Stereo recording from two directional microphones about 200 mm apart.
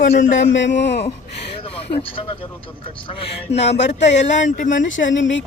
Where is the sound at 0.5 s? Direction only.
65° left (ahead or behind).